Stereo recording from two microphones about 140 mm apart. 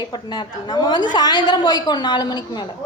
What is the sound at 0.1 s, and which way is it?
A woman's voice, 30° left (ahead or behind).